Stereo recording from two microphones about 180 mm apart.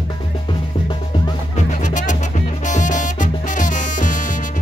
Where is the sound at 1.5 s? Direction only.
45° left (ahead or behind).